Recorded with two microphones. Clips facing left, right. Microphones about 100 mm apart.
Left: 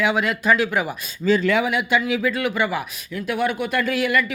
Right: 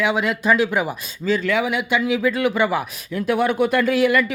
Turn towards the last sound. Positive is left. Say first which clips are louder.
# right 4 dB
turn(degrees=-30)  # may be behind; listen again after turning